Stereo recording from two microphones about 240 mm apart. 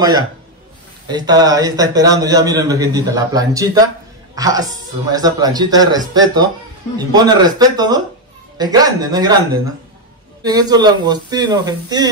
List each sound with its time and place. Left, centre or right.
1.0 s a man's voice: centre
10.4 s a man's voice: centre